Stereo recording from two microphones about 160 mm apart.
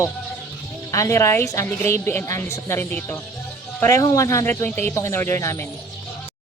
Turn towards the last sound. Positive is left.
turn(degrees=15)  # may be behind; listen again after turning